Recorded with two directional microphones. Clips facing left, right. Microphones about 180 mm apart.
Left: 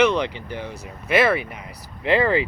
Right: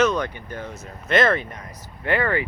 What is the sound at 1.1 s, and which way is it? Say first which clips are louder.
Speech: left 1 dB; 10° left (ahead or behind).